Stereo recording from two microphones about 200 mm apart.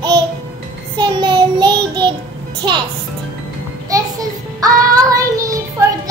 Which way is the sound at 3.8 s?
20° right (ahead or behind).